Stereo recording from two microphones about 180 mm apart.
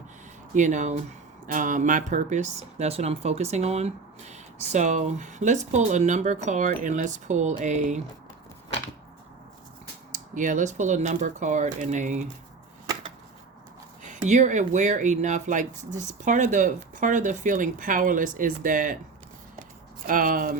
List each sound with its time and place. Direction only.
0.5 s speech: 40° right (ahead or behind)
10.1 s speech: 45° right (ahead or behind)
14.0 s speech: 45° right (ahead or behind)
20.1 s speech: 50° right (ahead or behind)